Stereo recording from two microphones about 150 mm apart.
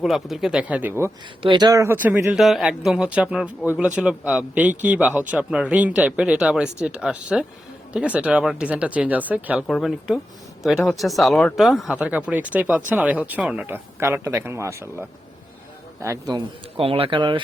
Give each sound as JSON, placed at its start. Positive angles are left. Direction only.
{"t": 0.0, "sound": "speech", "side_deg": 0}
{"t": 1.4, "sound": "speech", "side_deg": -30}
{"t": 2.3, "sound": "speech", "side_deg": 0}
{"t": 16.7, "sound": "speech", "side_deg": -40}